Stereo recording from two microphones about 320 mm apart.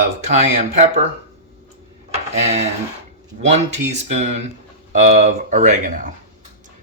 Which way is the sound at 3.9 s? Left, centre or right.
Right.